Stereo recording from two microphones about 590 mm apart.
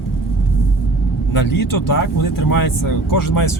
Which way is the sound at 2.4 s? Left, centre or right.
Left.